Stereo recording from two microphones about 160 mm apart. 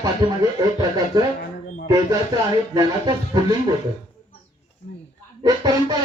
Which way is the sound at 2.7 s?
25° right (ahead or behind).